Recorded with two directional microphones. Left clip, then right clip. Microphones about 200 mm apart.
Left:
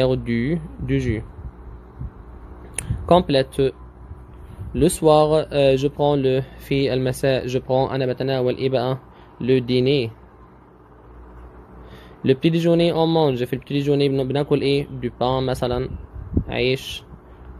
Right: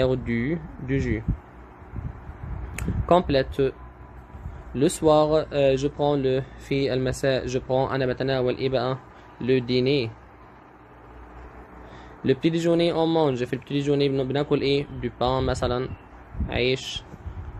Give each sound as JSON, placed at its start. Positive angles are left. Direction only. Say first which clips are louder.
{"t": 0.0, "sound": "speech", "louder": "left 3 dB", "side_deg": 20}
{"t": 2.7, "sound": "speech", "louder": "left 4 dB", "side_deg": 20}
{"t": 4.7, "sound": "speech", "louder": "left 4 dB", "side_deg": 25}
{"t": 12.2, "sound": "speech", "louder": "left 4 dB", "side_deg": 20}